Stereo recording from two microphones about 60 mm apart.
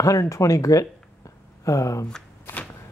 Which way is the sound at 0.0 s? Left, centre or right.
Left.